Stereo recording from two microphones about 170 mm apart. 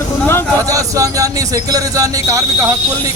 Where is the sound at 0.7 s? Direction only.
20° right (ahead or behind).